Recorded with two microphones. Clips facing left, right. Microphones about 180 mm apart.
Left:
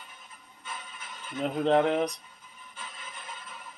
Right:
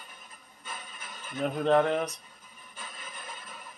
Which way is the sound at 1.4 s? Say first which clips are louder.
Even; 20° left (ahead or behind).